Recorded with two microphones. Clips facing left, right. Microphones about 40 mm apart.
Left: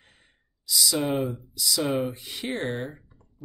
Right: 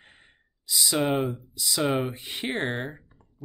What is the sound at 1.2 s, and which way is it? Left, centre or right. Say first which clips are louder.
Speech: even; right.